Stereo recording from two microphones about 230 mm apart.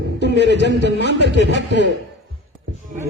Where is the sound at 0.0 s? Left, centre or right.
Right.